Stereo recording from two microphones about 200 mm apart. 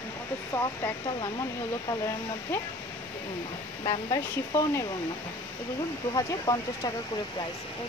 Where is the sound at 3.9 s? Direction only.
20° left (ahead or behind).